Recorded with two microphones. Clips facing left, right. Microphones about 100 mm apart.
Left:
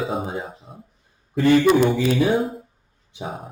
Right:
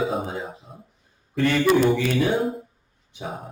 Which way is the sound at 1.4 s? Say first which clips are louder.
Left 6 dB; 20° left (ahead or behind).